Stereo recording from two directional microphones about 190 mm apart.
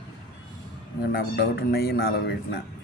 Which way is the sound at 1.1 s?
55° left (ahead or behind).